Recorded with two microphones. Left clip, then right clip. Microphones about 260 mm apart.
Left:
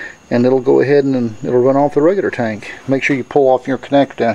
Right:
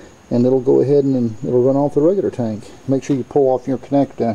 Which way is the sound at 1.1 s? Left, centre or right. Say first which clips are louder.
Left 2 dB; centre.